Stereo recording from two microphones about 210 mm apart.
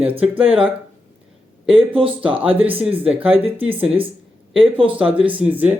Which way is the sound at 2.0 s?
25° right (ahead or behind).